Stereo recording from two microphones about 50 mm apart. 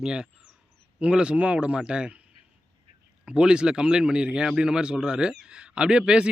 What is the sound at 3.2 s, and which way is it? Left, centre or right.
A man's voice, centre.